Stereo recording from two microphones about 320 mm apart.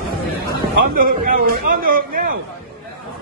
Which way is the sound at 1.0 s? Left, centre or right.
Right.